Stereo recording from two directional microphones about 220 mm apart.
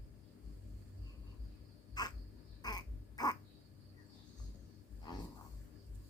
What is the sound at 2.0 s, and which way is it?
Cough, 20° left (ahead or behind).